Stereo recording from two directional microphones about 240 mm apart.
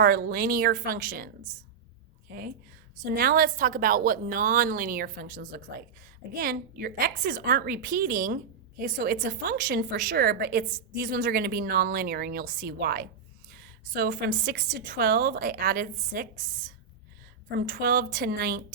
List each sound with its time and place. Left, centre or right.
0.0 s a woman's voice: right